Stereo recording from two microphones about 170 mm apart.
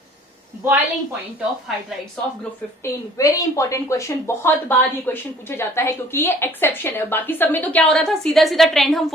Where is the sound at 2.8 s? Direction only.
20° left (ahead or behind).